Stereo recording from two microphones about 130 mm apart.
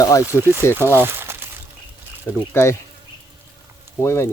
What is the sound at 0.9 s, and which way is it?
Crumpling, 15° right (ahead or behind).